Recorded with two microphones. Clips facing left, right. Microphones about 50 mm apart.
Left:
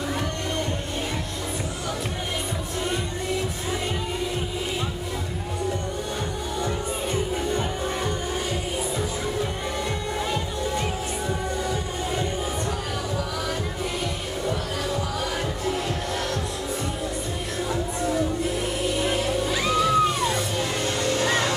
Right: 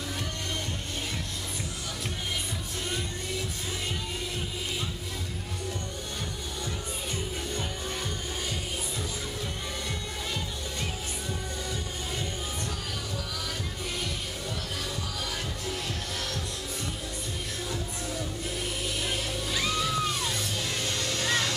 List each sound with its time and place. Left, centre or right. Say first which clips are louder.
11.2 s music: left 9 dB; centre
17.6 s music: left 12 dB; centre